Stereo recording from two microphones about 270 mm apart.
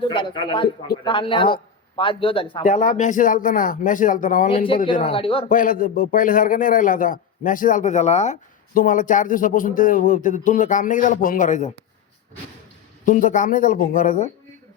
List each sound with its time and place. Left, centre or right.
0.0 s a man's voice: centre
13.1 s a man's voice: left